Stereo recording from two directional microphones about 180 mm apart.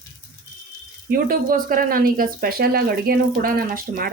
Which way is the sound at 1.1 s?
50° right (ahead or behind).